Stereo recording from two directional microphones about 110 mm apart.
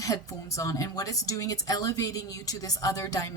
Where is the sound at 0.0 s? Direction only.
30° left (ahead or behind).